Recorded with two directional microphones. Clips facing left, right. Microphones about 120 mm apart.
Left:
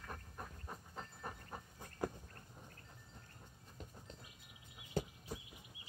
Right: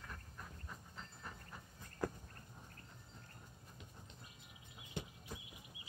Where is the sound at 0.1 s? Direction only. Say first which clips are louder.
Left 4 dB; 40° left (ahead or behind).